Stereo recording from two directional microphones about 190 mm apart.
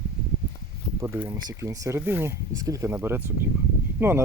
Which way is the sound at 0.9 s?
10° right (ahead or behind).